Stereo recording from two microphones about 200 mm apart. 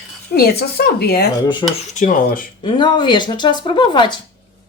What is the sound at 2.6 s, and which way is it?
Speech, 25° left (ahead or behind).